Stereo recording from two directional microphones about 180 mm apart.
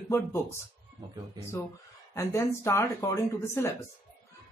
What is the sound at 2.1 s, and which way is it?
Speech, 15° left (ahead or behind).